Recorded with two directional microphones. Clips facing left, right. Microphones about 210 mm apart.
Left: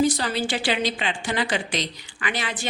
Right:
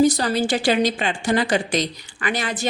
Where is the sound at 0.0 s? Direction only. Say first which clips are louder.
Right 5 dB; 40° right (ahead or behind).